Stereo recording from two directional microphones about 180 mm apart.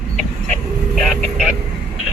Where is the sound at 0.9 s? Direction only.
Centre (ahead or behind).